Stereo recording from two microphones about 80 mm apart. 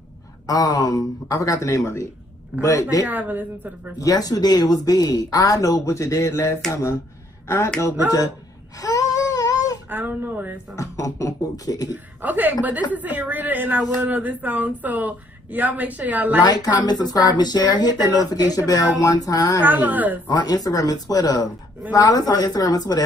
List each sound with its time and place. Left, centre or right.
0.5 s speech: left
1.3 s speech: left
3.1 s speech: right
4.0 s speech: left
8.7 s a sound: left
9.8 s speech: right
10.8 s speech: left
11.9 s speech: right
16.4 s speech: left
19.6 s speech: right
20.2 s speech: left